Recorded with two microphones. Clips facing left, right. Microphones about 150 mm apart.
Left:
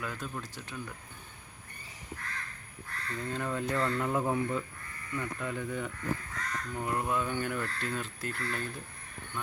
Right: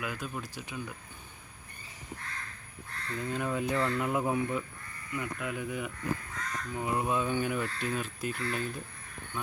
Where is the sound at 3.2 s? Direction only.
10° right (ahead or behind).